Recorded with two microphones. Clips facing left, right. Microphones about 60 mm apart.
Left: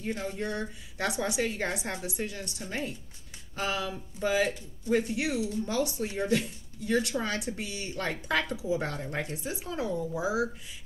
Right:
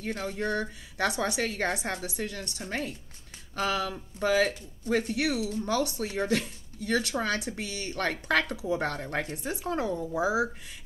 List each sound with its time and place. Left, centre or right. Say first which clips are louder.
0.0 s speech: right 1 dB; right
4.2 s speech: right 2 dB; right
9.0 s speech: right 2 dB; right